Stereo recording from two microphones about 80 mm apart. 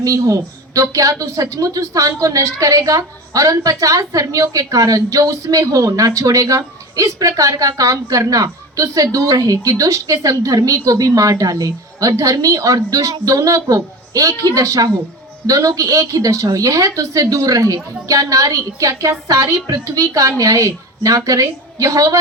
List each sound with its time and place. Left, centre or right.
0.0 s a woman's voice: right